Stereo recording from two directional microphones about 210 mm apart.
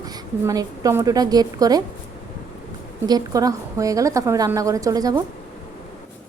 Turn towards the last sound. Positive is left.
turn(degrees=-15)  # may be behind; listen again after turning